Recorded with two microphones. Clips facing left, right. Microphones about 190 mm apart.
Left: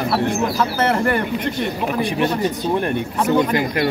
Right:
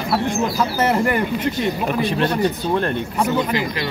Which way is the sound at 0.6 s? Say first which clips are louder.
Right 2 dB; 10° right (ahead or behind).